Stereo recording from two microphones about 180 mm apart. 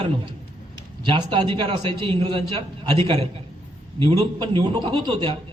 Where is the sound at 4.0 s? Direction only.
25° right (ahead or behind).